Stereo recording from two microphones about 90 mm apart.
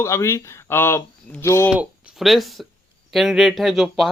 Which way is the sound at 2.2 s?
Centre (ahead or behind).